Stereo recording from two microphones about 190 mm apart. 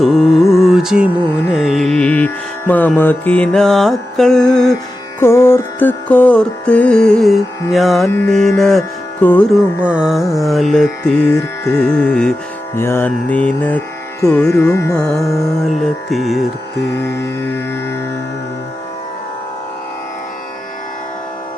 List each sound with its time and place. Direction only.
0.0 s music: centre (ahead or behind)
9.9 s music: 5° right (ahead or behind)
14.7 s music: 15° left (ahead or behind)
14.9 s music: 5° left (ahead or behind)
17.0 s music: 10° left (ahead or behind)